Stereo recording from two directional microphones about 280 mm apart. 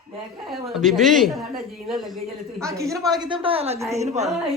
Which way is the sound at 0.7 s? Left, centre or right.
Centre.